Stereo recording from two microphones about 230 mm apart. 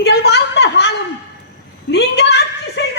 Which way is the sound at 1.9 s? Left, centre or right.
Left.